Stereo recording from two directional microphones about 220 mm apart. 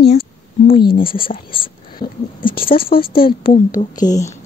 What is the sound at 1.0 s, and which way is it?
A woman's voice, 25° left (ahead or behind).